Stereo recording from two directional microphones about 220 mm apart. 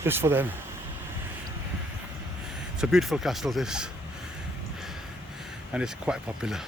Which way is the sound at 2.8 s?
Centre (ahead or behind).